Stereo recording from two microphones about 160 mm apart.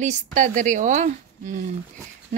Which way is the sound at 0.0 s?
50° right (ahead or behind).